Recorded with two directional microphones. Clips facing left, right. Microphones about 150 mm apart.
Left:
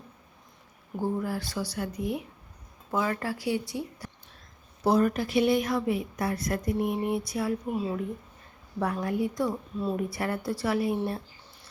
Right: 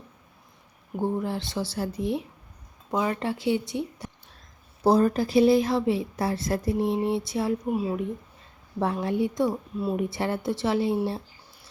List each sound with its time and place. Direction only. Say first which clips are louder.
0.9 s a woman's voice: right 2 dB; 20° right (ahead or behind)
7.6 s speech: right 3 dB; 10° right (ahead or behind)
8.8 s a woman's voice: right 3 dB; 25° right (ahead or behind)
9.5 s speech: right 2 dB; 10° right (ahead or behind)
10.0 s a woman's voice: right 3 dB; 25° right (ahead or behind)